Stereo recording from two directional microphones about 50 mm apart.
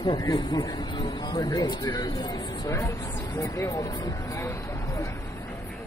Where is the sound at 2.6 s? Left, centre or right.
Left.